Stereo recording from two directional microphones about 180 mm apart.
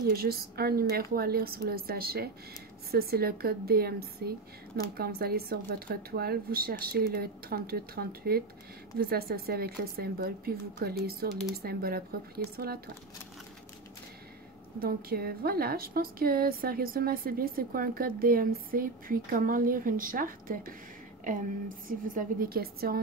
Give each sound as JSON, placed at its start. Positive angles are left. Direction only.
{"t": 0.1, "sound": "speech", "side_deg": -55}
{"t": 14.8, "sound": "a woman's voice", "side_deg": -55}